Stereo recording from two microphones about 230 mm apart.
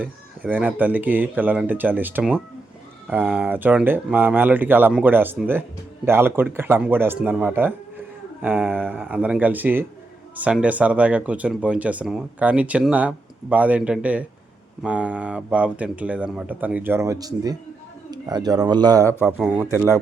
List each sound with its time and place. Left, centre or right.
0.0 s speech: centre
19.3 s speech: centre